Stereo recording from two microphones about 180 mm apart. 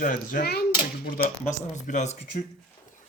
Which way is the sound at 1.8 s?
40° left (ahead or behind).